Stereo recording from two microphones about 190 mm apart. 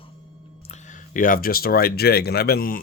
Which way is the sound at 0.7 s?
45° left (ahead or behind).